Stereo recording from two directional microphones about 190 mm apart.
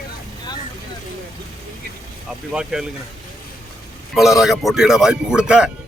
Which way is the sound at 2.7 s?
5° right (ahead or behind).